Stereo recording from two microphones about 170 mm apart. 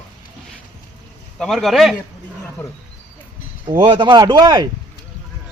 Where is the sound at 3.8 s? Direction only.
30° right (ahead or behind).